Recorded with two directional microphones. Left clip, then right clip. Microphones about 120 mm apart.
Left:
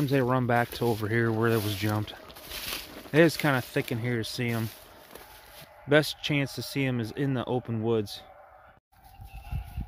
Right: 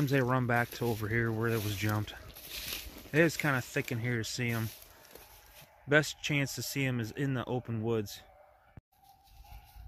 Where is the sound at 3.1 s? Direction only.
15° left (ahead or behind).